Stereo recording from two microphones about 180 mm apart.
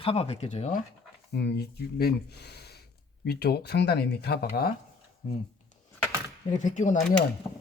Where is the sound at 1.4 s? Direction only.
65° left (ahead or behind).